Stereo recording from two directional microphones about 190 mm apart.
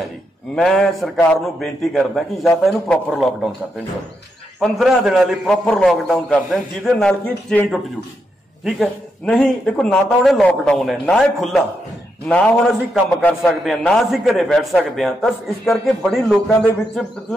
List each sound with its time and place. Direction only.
0.6 s a man's voice: centre (ahead or behind)
4.6 s a man's voice: centre (ahead or behind)